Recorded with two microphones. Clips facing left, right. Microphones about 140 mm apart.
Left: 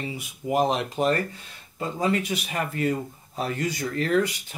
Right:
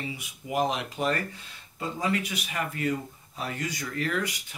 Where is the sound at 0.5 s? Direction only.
35° left (ahead or behind).